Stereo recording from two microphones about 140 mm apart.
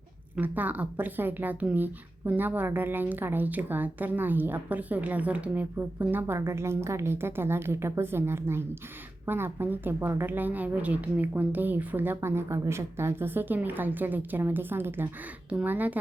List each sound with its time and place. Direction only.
0.3 s speech: 10° right (ahead or behind)